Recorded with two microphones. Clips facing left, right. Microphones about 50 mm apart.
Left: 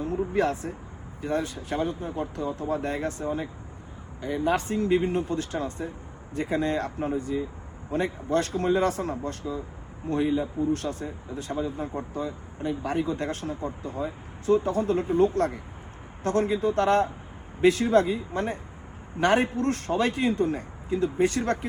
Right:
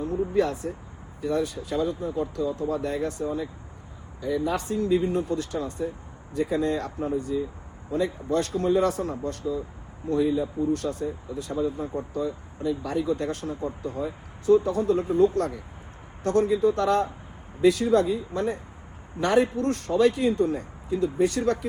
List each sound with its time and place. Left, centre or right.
0.3 s a man's voice: left
6.3 s a man's voice: left
10.1 s a man's voice: left
14.4 s a man's voice: left